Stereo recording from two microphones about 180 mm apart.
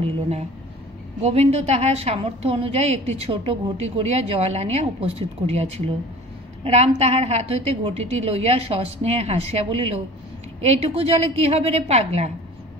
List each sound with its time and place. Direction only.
0.0 s a woman's voice: 35° right (ahead or behind)